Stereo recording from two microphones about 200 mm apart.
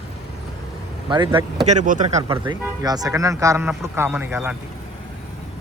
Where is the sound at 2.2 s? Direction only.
20° right (ahead or behind).